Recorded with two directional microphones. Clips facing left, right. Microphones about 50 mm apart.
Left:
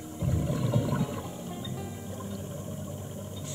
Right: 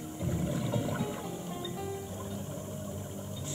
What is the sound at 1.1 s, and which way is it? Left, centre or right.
Music, centre.